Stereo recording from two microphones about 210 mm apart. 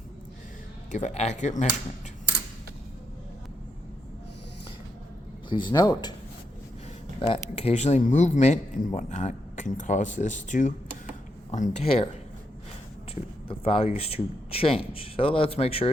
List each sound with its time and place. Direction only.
0.9 s speech: 35° left (ahead or behind)
5.5 s speech: 20° left (ahead or behind)
7.2 s speech: 25° left (ahead or behind)
13.5 s speech: 25° left (ahead or behind)